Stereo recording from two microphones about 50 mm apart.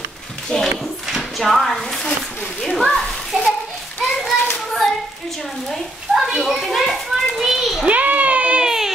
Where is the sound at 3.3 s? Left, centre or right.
Right.